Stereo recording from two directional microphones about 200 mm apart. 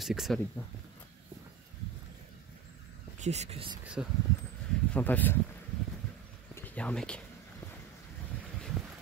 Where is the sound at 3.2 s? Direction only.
35° right (ahead or behind).